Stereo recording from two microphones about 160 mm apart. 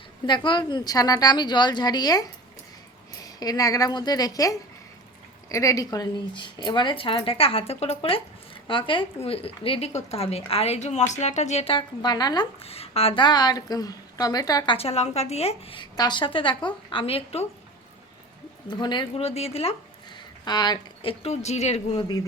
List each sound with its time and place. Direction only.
0.3 s a woman's voice: 30° left (ahead or behind)
12.6 s a woman's voice: 40° left (ahead or behind); by 14.8 s 25° left (ahead or behind)
14.8 s a woman's voice: 40° left (ahead or behind)
18.7 s a woman's voice: 30° left (ahead or behind)
19.2 s a woman's voice: 40° left (ahead or behind)
20.1 s speech: 25° left (ahead or behind); by 22.0 s 45° left (ahead or behind)